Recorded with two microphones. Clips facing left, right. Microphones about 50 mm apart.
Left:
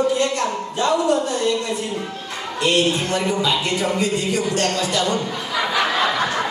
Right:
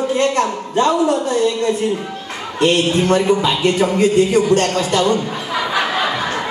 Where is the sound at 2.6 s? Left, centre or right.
Right.